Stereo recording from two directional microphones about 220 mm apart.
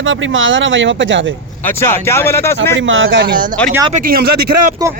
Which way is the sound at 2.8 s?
60° right (ahead or behind).